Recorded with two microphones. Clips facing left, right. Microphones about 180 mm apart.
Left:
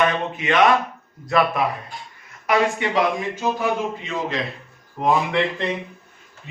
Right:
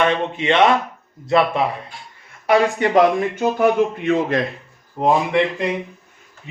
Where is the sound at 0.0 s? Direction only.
30° right (ahead or behind).